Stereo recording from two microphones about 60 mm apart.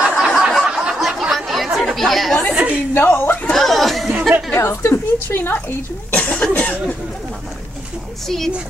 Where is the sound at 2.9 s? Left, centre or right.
Left.